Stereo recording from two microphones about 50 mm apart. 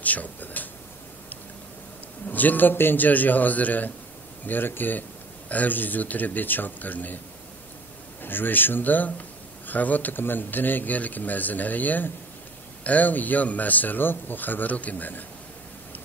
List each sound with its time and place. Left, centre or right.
0.0 s a sound: left
2.3 s speech: left
8.2 s speech: left